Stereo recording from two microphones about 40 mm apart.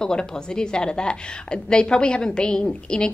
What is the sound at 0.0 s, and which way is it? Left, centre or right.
A woman's voice, centre.